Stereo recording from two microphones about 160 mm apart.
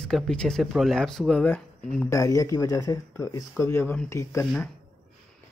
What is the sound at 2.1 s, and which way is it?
Speech, 20° left (ahead or behind).